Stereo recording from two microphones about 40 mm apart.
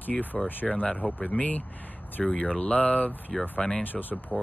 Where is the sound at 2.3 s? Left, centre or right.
Left.